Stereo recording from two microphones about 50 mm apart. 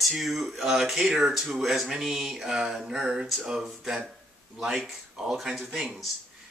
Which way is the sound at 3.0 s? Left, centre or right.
Right.